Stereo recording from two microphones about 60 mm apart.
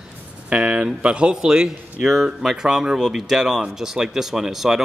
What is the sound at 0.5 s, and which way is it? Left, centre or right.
Speech, centre.